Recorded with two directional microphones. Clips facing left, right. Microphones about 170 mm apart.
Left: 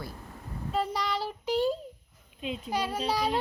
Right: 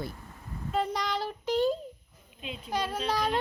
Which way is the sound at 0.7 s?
5° left (ahead or behind).